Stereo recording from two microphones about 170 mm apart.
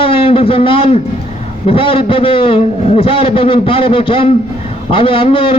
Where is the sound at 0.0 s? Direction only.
30° left (ahead or behind).